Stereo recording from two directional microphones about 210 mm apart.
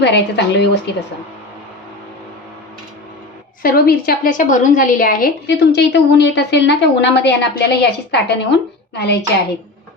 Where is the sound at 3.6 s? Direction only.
45° left (ahead or behind).